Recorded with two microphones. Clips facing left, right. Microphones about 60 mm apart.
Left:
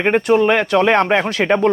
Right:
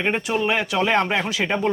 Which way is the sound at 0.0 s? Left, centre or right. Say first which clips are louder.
Left 8 dB; left.